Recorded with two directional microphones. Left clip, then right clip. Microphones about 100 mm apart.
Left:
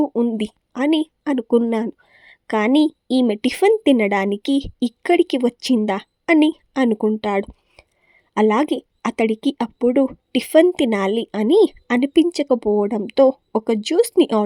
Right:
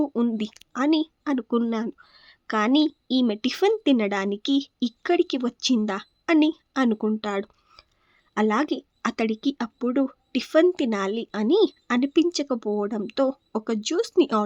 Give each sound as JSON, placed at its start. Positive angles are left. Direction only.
{"t": 0.1, "sound": "a woman's voice", "side_deg": 15}
{"t": 0.3, "sound": "a woman's voice", "side_deg": 35}
{"t": 7.8, "sound": "a sound", "side_deg": 40}
{"t": 9.0, "sound": "a woman's voice", "side_deg": 35}